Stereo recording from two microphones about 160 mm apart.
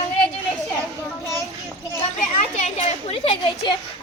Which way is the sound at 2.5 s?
45° left (ahead or behind).